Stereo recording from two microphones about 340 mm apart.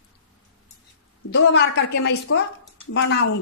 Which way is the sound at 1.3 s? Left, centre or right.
Left.